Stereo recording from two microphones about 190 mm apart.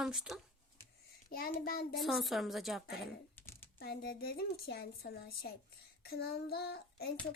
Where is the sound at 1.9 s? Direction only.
Centre (ahead or behind).